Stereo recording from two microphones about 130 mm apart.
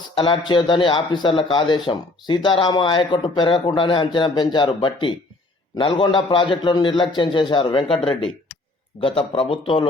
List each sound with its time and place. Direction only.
0.1 s a man's voice: 40° left (ahead or behind)